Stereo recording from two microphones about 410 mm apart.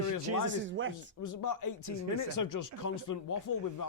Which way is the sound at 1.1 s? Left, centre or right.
Left.